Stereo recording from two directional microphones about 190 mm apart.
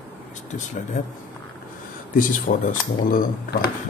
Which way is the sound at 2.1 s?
45° left (ahead or behind).